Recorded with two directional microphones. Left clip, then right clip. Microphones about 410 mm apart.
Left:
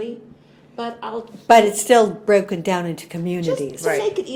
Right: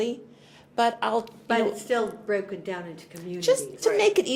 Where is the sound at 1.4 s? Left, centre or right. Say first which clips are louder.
Left 16 dB; left.